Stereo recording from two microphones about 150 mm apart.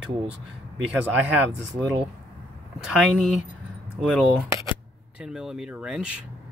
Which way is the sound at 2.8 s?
5° right (ahead or behind).